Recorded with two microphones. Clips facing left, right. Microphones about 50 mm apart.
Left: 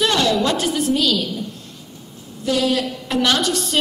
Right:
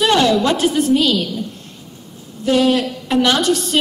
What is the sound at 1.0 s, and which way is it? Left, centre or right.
Speech, right.